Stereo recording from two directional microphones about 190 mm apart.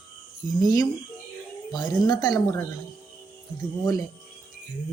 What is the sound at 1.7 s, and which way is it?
Speech, 20° left (ahead or behind).